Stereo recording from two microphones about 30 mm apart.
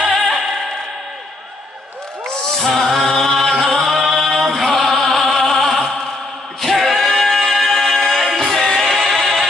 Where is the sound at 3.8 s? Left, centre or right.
Centre.